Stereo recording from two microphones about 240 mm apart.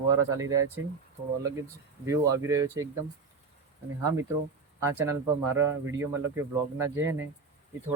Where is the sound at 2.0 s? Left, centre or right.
Centre.